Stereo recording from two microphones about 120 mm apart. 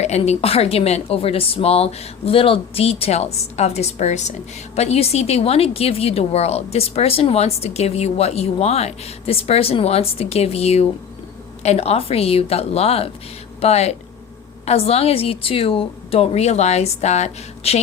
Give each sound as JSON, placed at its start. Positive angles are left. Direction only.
{"t": 0.0, "sound": "speech", "side_deg": 65}